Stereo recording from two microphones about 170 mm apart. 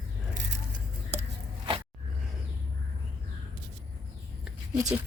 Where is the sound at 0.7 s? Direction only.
45° right (ahead or behind).